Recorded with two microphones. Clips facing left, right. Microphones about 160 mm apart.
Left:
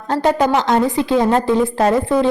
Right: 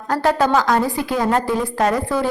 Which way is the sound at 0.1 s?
20° left (ahead or behind).